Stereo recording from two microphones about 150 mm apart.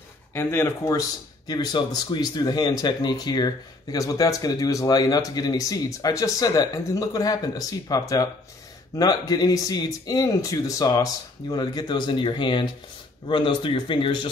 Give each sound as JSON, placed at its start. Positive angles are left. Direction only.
{"t": 0.3, "sound": "speech", "side_deg": 15}